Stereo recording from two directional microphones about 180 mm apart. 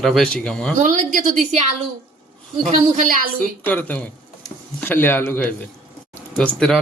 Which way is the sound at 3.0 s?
50° right (ahead or behind).